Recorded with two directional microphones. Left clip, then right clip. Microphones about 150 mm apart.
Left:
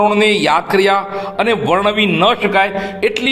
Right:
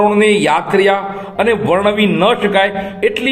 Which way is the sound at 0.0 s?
30° left (ahead or behind).